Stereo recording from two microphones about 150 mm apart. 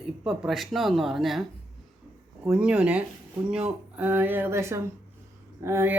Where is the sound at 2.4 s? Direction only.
5° right (ahead or behind).